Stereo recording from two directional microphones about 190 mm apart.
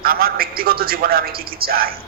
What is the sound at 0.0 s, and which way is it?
A man's voice, 50° right (ahead or behind).